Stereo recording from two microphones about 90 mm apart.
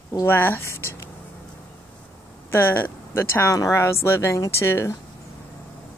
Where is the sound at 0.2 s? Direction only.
25° left (ahead or behind).